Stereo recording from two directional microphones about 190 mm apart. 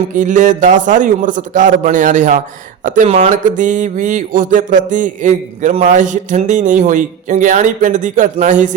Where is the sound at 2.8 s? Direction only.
40° right (ahead or behind).